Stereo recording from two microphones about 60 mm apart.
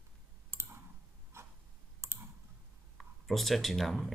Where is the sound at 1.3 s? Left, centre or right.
Right.